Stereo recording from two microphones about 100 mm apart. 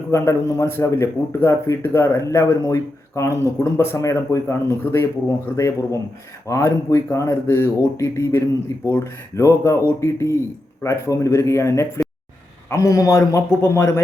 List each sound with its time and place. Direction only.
0.1 s a man's voice: 30° left (ahead or behind)